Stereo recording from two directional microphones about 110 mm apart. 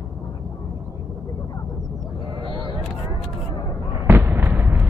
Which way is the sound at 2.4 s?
45° right (ahead or behind).